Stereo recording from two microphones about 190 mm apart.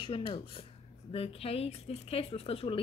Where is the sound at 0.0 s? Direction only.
25° left (ahead or behind).